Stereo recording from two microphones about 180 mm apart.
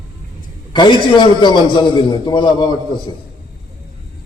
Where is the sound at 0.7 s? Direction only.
25° left (ahead or behind).